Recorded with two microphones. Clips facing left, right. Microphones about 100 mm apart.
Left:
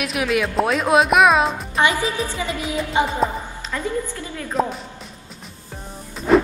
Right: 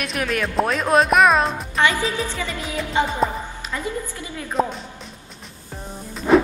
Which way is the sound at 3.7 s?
15° right (ahead or behind).